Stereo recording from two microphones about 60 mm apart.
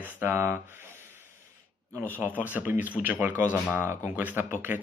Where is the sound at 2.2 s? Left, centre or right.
Right.